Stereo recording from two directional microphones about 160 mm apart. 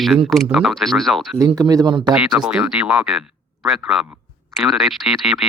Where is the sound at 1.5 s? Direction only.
25° right (ahead or behind).